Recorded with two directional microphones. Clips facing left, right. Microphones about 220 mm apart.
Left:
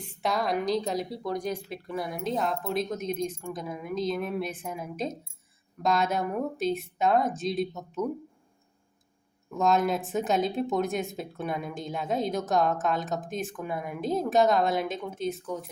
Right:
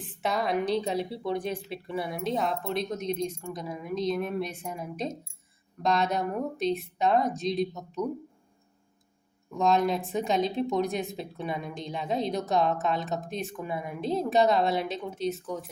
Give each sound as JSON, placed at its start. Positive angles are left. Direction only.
{"t": 0.0, "sound": "speech", "side_deg": 0}
{"t": 1.4, "sound": "speech", "side_deg": -30}
{"t": 1.7, "sound": "speech", "side_deg": 0}
{"t": 9.5, "sound": "speech", "side_deg": 0}